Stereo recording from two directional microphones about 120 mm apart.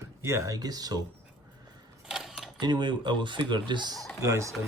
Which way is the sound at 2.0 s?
Centre (ahead or behind).